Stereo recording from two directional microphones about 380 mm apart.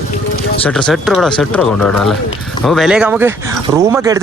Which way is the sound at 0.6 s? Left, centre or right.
Centre.